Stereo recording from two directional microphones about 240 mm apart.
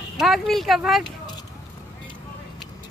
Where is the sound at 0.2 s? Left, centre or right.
Centre.